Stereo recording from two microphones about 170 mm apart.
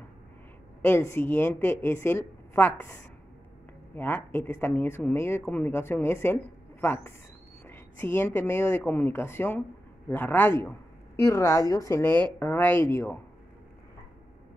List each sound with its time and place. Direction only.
0.8 s a woman's voice: 15° left (ahead or behind)
3.9 s a woman's voice: 10° left (ahead or behind)